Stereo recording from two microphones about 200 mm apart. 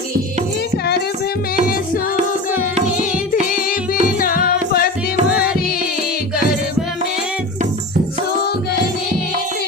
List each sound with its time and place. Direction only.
4.0 s music: 45° left (ahead or behind)